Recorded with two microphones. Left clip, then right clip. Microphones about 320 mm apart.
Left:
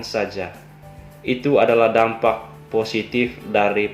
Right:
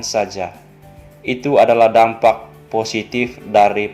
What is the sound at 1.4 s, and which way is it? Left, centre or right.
Speech, centre.